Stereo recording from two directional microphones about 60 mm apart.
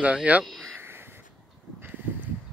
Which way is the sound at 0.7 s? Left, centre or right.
Right.